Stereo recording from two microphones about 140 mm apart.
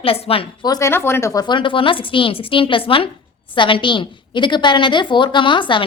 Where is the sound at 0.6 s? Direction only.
20° left (ahead or behind).